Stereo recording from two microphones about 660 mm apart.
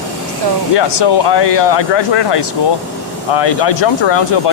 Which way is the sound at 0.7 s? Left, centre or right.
Left.